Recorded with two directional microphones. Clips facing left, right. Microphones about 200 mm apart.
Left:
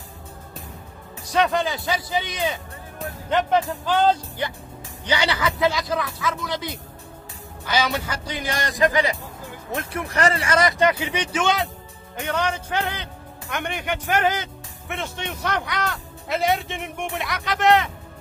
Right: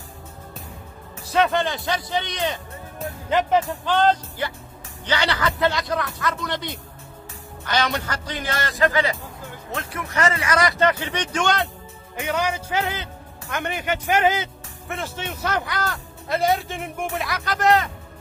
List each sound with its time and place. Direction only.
1.3 s a man's voice: centre (ahead or behind); by 10.0 s 20° left (ahead or behind)
10.0 s speech: 35° left (ahead or behind); by 11.7 s centre (ahead or behind)
12.2 s a man's voice: 10° right (ahead or behind)